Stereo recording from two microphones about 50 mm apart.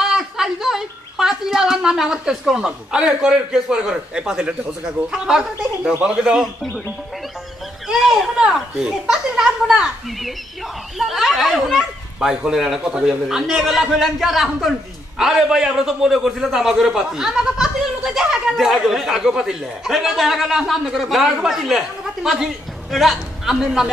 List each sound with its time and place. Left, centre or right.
0.0 s a woman's voice: centre
7.9 s a man's voice: centre
11.0 s a child's voice: centre